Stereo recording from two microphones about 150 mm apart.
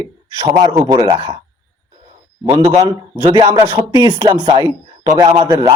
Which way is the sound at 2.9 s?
30° right (ahead or behind).